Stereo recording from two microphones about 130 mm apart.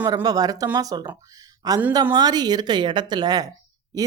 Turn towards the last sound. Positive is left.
turn(degrees=-30)  # may be behind; listen again after turning